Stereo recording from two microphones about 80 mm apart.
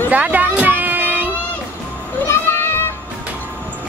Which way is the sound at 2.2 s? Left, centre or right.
Left.